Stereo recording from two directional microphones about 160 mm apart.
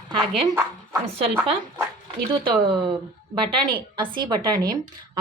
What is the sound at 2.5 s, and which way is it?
Speech, 30° right (ahead or behind).